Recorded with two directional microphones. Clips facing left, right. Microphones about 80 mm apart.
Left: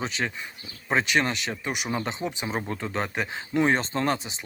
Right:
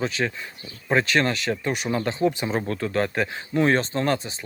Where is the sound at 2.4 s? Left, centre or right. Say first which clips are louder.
Right 4 dB; centre.